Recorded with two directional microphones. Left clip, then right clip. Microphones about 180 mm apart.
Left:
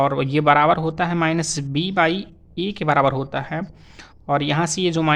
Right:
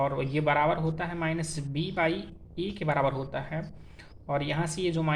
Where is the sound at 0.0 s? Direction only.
50° left (ahead or behind).